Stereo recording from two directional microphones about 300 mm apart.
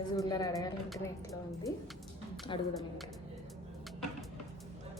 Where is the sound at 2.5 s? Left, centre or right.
Centre.